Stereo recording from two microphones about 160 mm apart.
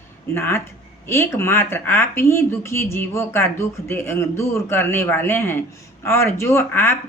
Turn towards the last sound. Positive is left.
turn(degrees=15)  # may be behind; listen again after turning